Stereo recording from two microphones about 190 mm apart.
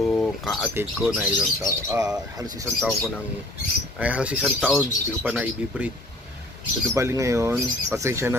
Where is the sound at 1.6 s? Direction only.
20° right (ahead or behind).